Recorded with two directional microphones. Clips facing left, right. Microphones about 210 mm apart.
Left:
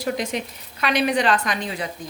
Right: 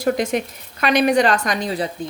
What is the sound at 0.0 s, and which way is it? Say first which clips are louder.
A woman's voice: right 6 dB; 50° right (ahead or behind).